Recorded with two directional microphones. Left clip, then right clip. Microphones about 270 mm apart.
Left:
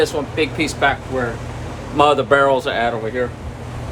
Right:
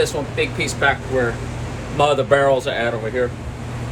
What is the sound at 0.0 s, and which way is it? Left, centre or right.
Speech, centre.